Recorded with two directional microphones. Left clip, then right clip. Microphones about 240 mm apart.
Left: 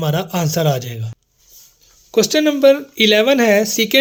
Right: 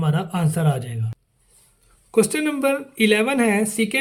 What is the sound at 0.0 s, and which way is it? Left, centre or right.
Speech, left.